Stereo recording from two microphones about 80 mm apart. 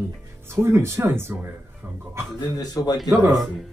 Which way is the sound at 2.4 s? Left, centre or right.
Left.